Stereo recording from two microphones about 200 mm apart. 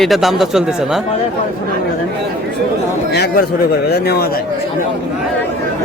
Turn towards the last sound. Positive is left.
turn(degrees=55)  # may be behind; listen again after turning